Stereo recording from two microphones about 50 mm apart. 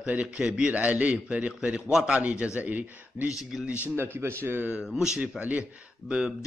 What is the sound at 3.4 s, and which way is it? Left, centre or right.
Speech, centre.